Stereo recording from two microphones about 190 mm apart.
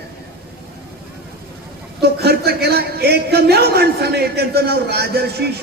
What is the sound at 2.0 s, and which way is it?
A man's voice, 55° right (ahead or behind).